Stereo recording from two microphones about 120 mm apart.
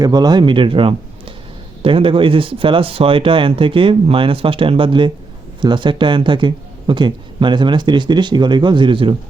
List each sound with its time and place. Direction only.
0.0 s a man's voice: 35° right (ahead or behind)